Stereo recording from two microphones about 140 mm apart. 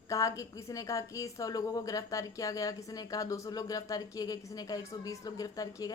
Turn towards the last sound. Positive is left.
turn(degrees=25)  # may be behind; listen again after turning